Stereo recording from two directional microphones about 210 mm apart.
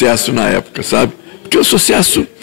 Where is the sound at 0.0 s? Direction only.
15° left (ahead or behind).